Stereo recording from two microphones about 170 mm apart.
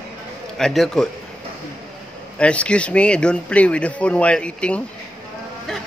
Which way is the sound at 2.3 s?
5° left (ahead or behind).